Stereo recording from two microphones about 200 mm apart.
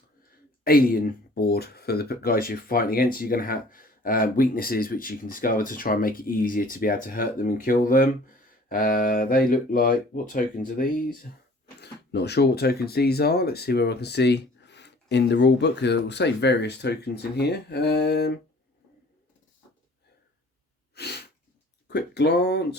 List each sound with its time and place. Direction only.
0.2 s speech: 45° left (ahead or behind)
11.8 s speech: 55° left (ahead or behind)
20.9 s sneeze: 55° left (ahead or behind)
21.8 s speech: 55° left (ahead or behind)